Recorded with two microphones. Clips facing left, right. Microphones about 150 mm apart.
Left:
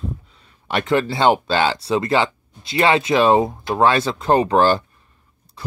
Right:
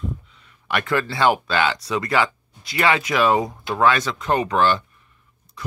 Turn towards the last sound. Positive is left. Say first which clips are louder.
# left 2 dB
turn(degrees=30)  # may be behind; listen again after turning